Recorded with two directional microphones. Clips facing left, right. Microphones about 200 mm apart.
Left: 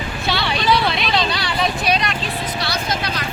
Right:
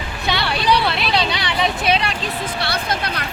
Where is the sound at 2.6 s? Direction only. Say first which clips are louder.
Right 1 dB; 60° right (ahead or behind).